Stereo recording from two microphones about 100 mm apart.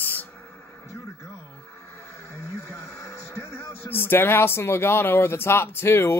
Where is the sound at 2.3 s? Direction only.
30° left (ahead or behind).